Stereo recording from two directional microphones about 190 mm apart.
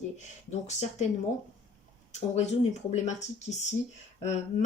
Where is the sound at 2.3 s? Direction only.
35° left (ahead or behind).